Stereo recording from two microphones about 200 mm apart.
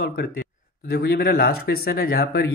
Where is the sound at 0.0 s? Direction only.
50° left (ahead or behind).